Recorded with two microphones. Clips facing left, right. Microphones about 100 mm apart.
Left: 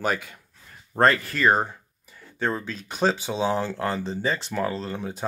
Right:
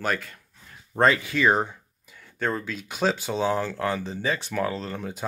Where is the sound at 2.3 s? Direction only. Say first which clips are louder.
Left 1 dB; 10° left (ahead or behind).